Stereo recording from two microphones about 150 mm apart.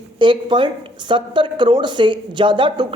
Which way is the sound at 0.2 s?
35° right (ahead or behind).